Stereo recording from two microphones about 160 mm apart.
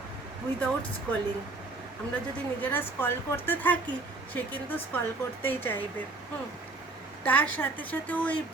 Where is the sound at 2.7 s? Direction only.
10° left (ahead or behind).